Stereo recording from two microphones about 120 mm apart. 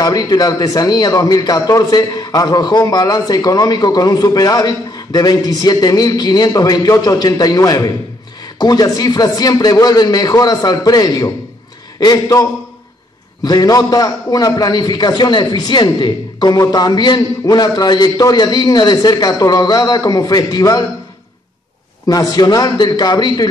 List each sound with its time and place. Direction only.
0.0 s a man's voice: 35° left (ahead or behind)
22.0 s a man's voice: 30° left (ahead or behind)